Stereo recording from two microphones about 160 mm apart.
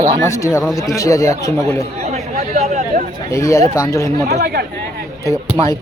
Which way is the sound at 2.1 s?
45° right (ahead or behind).